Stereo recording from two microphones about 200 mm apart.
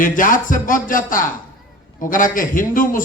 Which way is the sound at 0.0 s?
40° left (ahead or behind).